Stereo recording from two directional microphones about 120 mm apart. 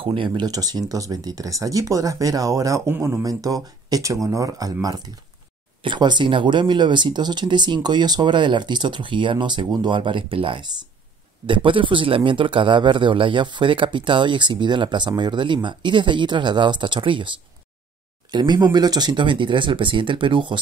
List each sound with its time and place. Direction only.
0.0 s speech: 45° right (ahead or behind)
18.3 s speech: 35° right (ahead or behind)